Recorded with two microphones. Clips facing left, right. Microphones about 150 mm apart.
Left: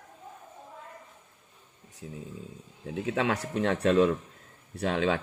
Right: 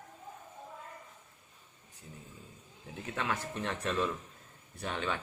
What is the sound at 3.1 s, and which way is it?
Speech, 85° left.